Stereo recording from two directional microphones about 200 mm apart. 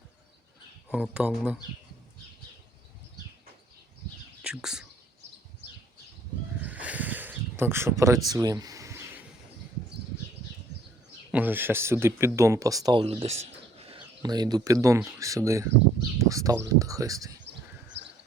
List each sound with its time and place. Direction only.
0.9 s speech: 5° right (ahead or behind)
4.4 s speech: 5° right (ahead or behind)
6.6 s a sound: 5° right (ahead or behind)
11.3 s speech: 10° right (ahead or behind)